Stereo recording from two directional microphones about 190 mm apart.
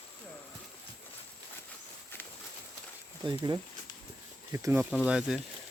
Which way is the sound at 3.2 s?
25° right (ahead or behind).